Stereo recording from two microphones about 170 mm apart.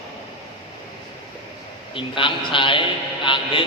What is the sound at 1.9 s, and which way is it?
A man's voice, 30° left (ahead or behind).